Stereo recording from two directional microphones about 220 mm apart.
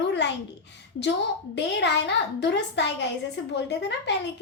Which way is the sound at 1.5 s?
50° left (ahead or behind).